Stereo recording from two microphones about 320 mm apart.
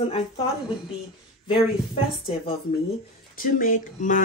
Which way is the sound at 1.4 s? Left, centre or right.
Centre.